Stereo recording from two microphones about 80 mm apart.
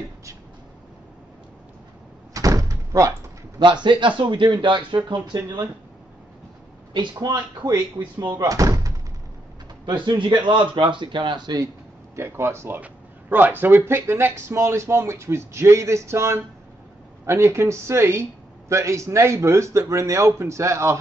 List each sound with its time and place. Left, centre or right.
2.3 s door: right
3.5 s a man's voice: right
6.9 s a man's voice: right
8.5 s speech: right
9.9 s a man's voice: right
12.2 s speech: right